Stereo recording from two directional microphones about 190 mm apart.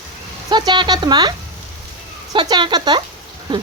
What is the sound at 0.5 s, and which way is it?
Speech, 20° right (ahead or behind).